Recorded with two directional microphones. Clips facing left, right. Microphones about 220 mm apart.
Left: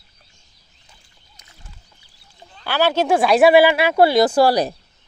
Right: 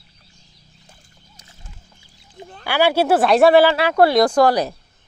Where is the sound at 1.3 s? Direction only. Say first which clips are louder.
Right 1 dB; 30° right (ahead or behind).